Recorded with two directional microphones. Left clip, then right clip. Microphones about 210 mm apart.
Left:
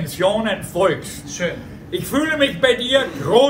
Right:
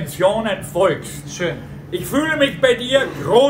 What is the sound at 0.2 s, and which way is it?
A man's voice, 10° right (ahead or behind).